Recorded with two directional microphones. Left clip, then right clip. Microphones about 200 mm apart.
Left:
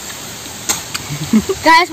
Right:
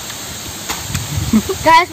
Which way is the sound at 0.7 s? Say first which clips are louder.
Left 4 dB; 55° left (ahead or behind).